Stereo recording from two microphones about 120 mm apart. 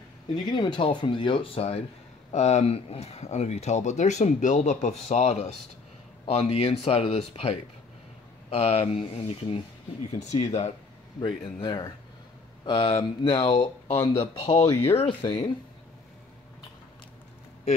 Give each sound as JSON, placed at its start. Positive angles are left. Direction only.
{"t": 0.5, "sound": "speech", "side_deg": 40}
{"t": 5.0, "sound": "speech", "side_deg": 65}
{"t": 10.1, "sound": "speech", "side_deg": 70}
{"t": 11.1, "sound": "a man's voice", "side_deg": 40}